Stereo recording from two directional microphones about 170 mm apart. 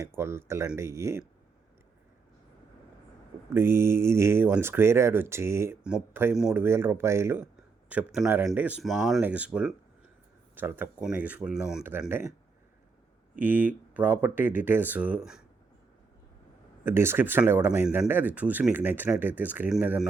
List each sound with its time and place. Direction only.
0.1 s speech: 15° right (ahead or behind)
3.5 s speech: 15° right (ahead or behind)
13.4 s speech: 10° right (ahead or behind)
16.8 s speech: 15° right (ahead or behind)